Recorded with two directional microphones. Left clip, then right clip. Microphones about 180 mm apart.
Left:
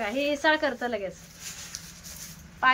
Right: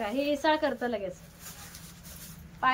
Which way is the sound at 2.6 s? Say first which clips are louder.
Left 4 dB; 25° left (ahead or behind).